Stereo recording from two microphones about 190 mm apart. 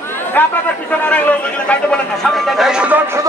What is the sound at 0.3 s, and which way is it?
A man's voice, 10° left (ahead or behind).